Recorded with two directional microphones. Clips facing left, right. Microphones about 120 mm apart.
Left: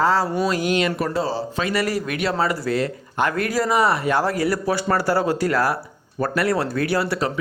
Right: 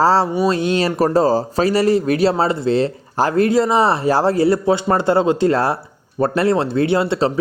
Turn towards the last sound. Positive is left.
turn(degrees=-30)  # may be behind; listen again after turning